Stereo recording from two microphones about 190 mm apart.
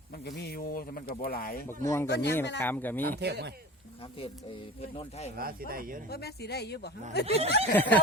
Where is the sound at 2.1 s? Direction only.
60° left (ahead or behind).